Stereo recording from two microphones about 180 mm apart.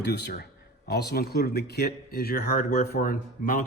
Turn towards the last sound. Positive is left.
turn(degrees=50)  # may be behind; listen again after turning